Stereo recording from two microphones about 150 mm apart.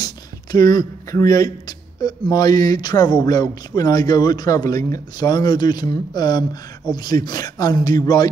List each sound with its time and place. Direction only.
0.0 s speech: 25° left (ahead or behind)